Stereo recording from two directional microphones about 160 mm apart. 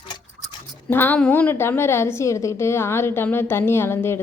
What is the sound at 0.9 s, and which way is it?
A woman's voice, 15° left (ahead or behind).